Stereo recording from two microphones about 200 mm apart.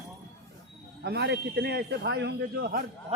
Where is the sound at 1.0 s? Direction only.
55° right (ahead or behind).